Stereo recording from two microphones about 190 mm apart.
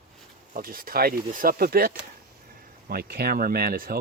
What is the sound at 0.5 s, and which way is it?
Speech, 50° right (ahead or behind).